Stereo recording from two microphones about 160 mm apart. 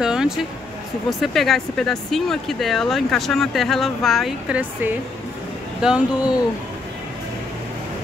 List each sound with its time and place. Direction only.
0.0 s a sound: 5° right (ahead or behind)
1.2 s speech: centre (ahead or behind)
5.8 s speech: 5° right (ahead or behind)